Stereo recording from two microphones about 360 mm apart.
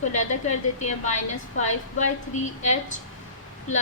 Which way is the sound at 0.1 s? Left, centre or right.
Centre.